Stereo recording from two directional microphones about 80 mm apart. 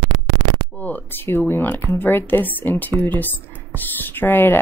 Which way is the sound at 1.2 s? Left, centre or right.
Left.